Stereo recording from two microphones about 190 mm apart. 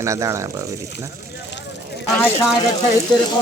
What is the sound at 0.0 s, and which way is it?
Speech, 15° right (ahead or behind).